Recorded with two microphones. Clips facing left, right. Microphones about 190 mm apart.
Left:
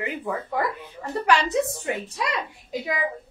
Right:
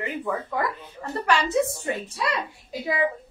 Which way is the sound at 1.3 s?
15° left (ahead or behind).